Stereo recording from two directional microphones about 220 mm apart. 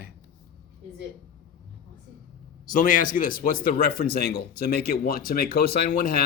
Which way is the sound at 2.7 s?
35° left (ahead or behind).